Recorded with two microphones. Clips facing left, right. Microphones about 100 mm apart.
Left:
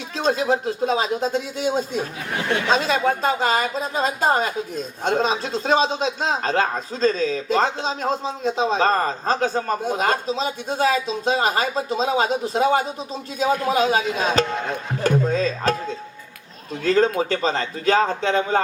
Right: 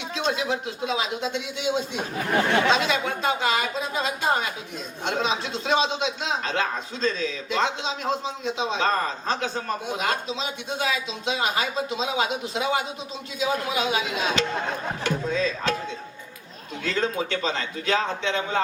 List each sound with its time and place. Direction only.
0.2 s a man's voice: 40° left (ahead or behind)
16.8 s a man's voice: 40° left (ahead or behind)